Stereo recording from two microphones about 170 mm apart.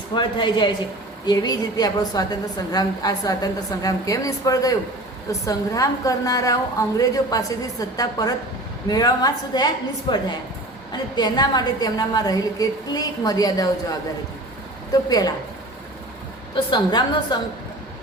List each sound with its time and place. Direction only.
0.1 s a woman's voice: 30° left (ahead or behind)
16.7 s a woman's voice: 25° left (ahead or behind)